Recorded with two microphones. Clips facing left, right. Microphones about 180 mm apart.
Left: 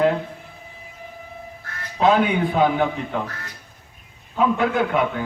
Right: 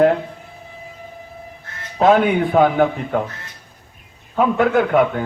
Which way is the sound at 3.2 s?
20° right (ahead or behind).